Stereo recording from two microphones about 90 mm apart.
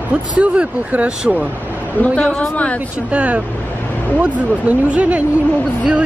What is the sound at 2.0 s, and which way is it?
Speech, 20° left (ahead or behind).